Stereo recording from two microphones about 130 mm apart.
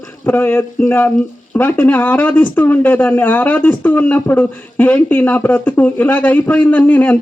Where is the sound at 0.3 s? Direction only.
15° left (ahead or behind).